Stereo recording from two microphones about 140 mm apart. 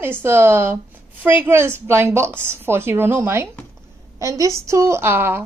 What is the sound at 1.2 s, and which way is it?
A woman's voice, 15° right (ahead or behind).